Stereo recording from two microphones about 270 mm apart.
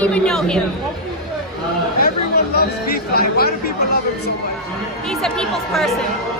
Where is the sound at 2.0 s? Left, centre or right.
Left.